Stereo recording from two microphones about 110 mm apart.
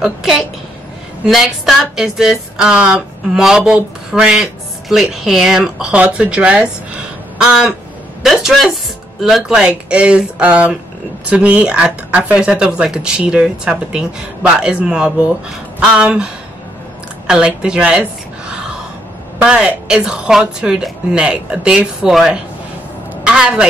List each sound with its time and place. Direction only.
0.0 s a woman's voice: centre (ahead or behind)
7.3 s a sound: 10° right (ahead or behind)
8.2 s a woman's voice: 5° right (ahead or behind)
17.3 s speech: 5° right (ahead or behind)
19.3 s speech: 10° right (ahead or behind)
23.2 s a sound: 10° right (ahead or behind)